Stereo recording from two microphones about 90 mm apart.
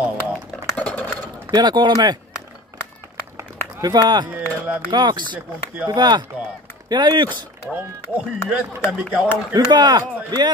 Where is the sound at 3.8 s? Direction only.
50° right (ahead or behind).